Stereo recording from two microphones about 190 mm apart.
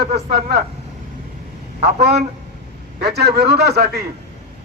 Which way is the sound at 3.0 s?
60° right (ahead or behind).